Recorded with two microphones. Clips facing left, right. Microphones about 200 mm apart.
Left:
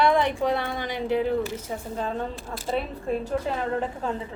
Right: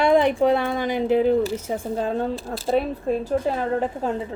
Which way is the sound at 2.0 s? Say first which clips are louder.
Right 4 dB; 45° right (ahead or behind).